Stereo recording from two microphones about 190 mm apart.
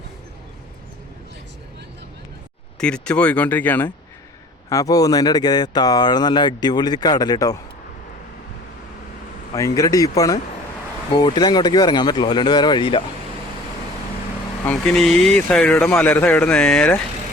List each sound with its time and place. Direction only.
2.8 s speech: 5° left (ahead or behind)
9.6 s speech: 15° left (ahead or behind)
14.6 s speech: 5° left (ahead or behind)